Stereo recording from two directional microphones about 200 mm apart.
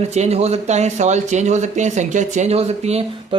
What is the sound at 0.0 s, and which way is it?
Speech, 35° right (ahead or behind).